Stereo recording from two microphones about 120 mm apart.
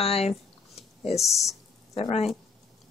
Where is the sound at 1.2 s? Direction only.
Centre (ahead or behind).